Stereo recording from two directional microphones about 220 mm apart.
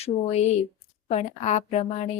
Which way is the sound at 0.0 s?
30° left (ahead or behind).